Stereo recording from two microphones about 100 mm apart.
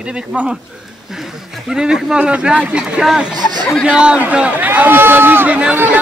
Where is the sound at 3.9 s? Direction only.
10° right (ahead or behind).